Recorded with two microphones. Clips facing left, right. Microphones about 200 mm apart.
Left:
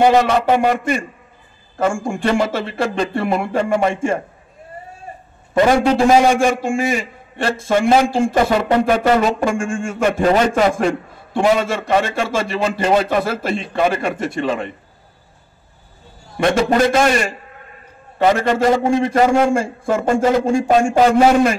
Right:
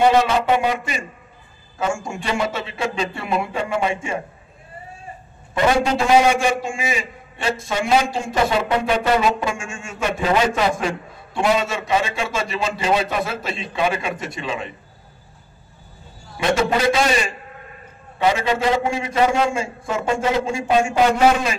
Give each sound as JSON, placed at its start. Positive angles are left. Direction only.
{"t": 0.0, "sound": "a man's voice", "side_deg": 55}
{"t": 5.5, "sound": "a man's voice", "side_deg": 45}
{"t": 16.3, "sound": "a man's voice", "side_deg": 50}